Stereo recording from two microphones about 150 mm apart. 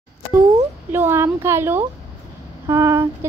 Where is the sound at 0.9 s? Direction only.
15° right (ahead or behind).